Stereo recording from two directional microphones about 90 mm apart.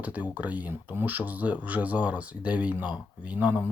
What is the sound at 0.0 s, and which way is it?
Speech, 15° right (ahead or behind).